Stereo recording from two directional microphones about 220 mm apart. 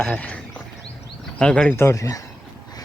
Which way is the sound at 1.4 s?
5° left (ahead or behind).